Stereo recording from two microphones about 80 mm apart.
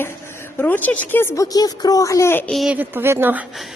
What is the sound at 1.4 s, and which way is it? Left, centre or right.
Speech, left.